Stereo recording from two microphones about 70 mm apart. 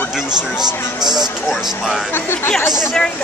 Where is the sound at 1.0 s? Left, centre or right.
Right.